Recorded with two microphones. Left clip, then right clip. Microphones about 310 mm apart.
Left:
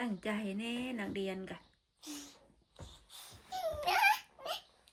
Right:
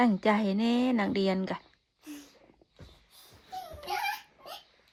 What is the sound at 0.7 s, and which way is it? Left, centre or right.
Speech, right.